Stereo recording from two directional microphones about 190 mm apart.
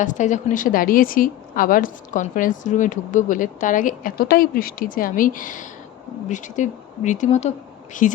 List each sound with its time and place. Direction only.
0.0 s a woman's voice: 40° left (ahead or behind)